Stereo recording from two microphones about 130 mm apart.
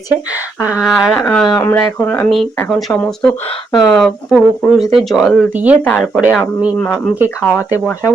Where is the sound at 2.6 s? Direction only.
Centre (ahead or behind).